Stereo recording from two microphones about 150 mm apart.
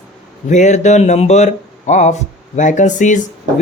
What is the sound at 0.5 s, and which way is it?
Speech, 50° left (ahead or behind).